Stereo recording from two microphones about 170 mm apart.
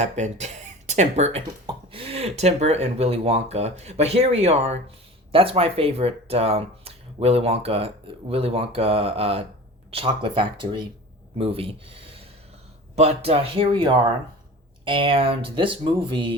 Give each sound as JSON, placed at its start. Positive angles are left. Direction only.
{"t": 0.0, "sound": "speech", "side_deg": -45}